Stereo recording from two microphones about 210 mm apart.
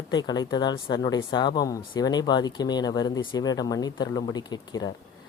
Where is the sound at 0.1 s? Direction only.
20° left (ahead or behind).